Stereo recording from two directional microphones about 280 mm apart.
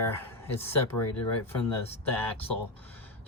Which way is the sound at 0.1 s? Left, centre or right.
Centre.